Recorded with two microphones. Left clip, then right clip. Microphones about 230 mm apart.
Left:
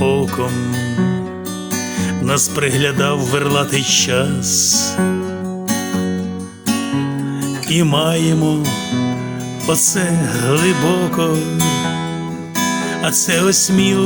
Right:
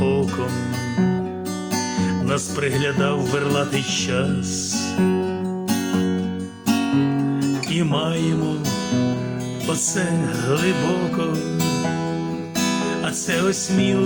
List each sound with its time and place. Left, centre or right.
0.0 s music: left
2.0 s music: left
7.7 s music: left
9.6 s music: left
13.0 s music: left